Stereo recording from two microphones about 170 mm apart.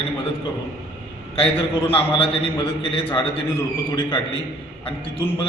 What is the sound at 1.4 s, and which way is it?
Speech, 30° left (ahead or behind).